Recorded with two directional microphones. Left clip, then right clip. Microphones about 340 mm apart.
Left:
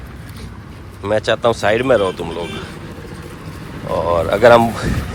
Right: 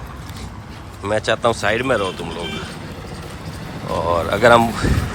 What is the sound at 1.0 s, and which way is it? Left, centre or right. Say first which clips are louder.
Speech: left 2 dB; centre.